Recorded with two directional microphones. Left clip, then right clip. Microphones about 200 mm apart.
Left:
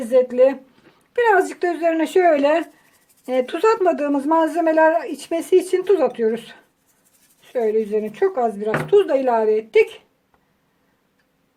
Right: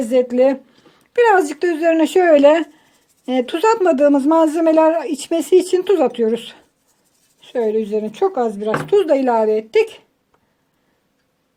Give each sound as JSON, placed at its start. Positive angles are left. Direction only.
{"t": 0.1, "sound": "a man's voice", "side_deg": -35}
{"t": 7.4, "sound": "a man's voice", "side_deg": -30}